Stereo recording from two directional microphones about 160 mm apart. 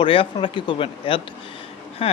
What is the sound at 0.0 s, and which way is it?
Speech, 35° left (ahead or behind).